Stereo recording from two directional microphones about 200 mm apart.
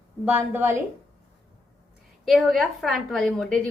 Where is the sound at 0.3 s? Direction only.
10° right (ahead or behind).